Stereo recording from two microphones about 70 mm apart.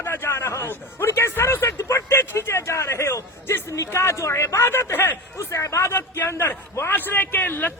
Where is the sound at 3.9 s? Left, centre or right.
Left.